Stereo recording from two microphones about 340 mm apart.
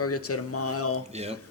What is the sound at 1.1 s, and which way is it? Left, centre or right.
Speech, centre.